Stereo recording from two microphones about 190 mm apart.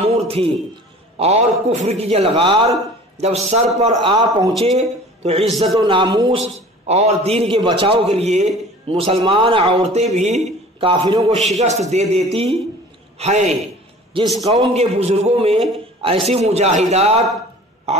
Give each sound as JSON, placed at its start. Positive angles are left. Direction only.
{"t": 0.1, "sound": "a sound", "side_deg": -30}
{"t": 1.2, "sound": "a man's voice", "side_deg": -35}
{"t": 3.9, "sound": "a man's voice", "side_deg": -25}
{"t": 4.6, "sound": "a man's voice", "side_deg": -35}
{"t": 11.5, "sound": "a man's voice", "side_deg": -35}
{"t": 17.9, "sound": "a sound", "side_deg": -35}